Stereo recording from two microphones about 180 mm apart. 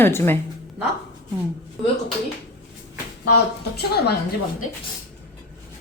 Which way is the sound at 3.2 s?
65° left (ahead or behind).